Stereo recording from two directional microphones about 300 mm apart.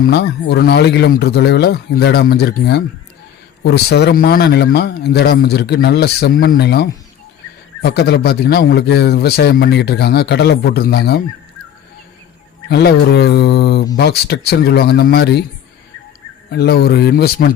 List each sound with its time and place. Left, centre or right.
0.0 s a man's voice: left
12.6 s a man's voice: left
16.5 s a man's voice: left